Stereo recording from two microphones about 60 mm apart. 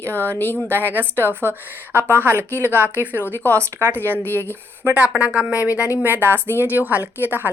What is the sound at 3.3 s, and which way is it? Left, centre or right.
Speech, right.